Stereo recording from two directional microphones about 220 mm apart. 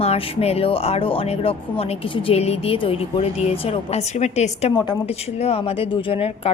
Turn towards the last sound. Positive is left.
turn(degrees=25)  # may be behind; listen again after turning